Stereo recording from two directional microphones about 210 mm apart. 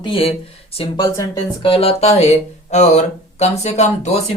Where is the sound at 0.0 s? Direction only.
25° left (ahead or behind).